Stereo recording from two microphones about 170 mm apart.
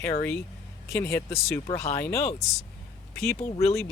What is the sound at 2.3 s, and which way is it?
Speech, 40° left (ahead or behind).